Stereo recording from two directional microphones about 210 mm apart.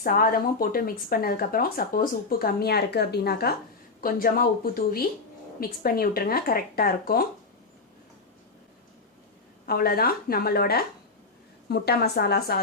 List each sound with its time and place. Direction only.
0.0 s speech: 45° left (ahead or behind)
9.6 s speech: 45° left (ahead or behind)